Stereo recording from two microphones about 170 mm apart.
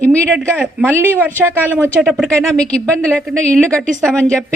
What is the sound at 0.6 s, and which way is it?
Speech, 10° right (ahead or behind).